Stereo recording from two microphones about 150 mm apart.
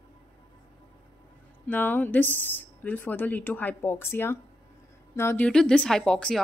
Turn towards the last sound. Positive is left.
turn(degrees=5)  # may be behind; listen again after turning